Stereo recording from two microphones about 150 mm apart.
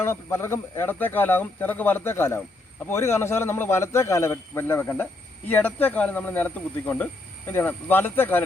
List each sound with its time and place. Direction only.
0.0 s speech: 15° left (ahead or behind)